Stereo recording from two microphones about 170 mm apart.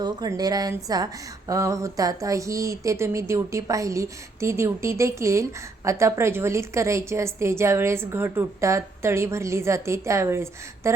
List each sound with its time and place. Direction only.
0.0 s speech: 20° right (ahead or behind)